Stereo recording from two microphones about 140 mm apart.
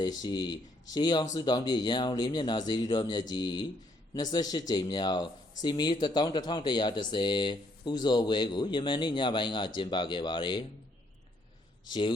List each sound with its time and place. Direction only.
0.0 s speech: 30° left (ahead or behind)
11.9 s speech: 35° left (ahead or behind)